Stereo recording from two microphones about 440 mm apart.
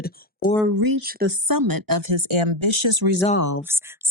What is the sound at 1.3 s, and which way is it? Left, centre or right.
Speech, right.